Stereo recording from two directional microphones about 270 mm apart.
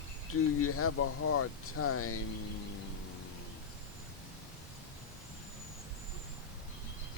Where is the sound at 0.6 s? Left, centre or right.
Left.